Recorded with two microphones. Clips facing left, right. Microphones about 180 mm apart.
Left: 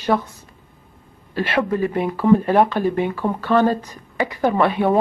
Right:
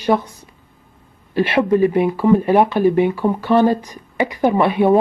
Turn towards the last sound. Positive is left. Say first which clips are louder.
# right 3 dB
turn(degrees=-15)  # may be behind; listen again after turning